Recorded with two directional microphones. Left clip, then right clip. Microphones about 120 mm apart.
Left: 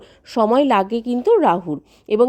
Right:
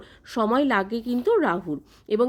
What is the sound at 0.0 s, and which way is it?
Speech, 40° left (ahead or behind).